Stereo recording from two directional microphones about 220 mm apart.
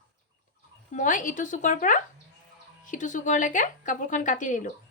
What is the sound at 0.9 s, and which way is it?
A woman's voice, 35° left (ahead or behind).